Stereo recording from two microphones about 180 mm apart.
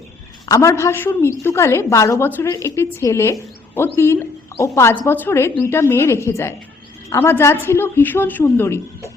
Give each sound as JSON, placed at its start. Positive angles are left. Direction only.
{"t": 0.4, "sound": "a woman's voice", "side_deg": 15}